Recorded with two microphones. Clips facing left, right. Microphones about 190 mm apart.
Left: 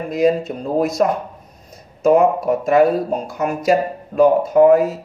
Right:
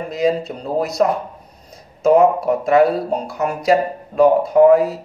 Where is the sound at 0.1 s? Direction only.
50° left (ahead or behind).